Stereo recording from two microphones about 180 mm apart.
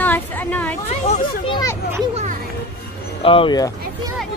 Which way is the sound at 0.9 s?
35° left (ahead or behind).